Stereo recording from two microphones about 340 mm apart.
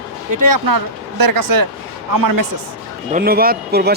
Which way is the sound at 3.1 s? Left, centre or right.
Right.